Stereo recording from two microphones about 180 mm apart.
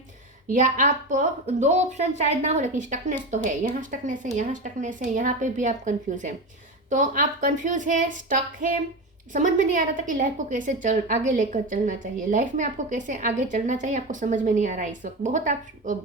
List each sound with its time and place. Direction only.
0.4 s a woman's voice: 45° right (ahead or behind)